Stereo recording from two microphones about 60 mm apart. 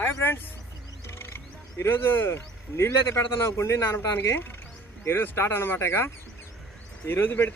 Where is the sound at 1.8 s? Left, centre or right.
Left.